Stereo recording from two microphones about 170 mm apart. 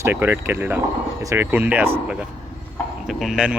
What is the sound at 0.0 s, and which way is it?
Speech, 15° right (ahead or behind).